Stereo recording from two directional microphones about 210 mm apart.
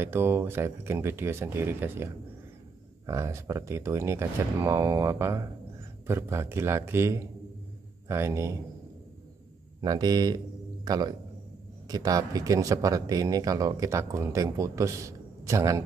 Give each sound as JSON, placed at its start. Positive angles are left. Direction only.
{"t": 0.0, "sound": "speech", "side_deg": -10}
{"t": 3.1, "sound": "speech", "side_deg": -15}
{"t": 9.8, "sound": "a man's voice", "side_deg": -20}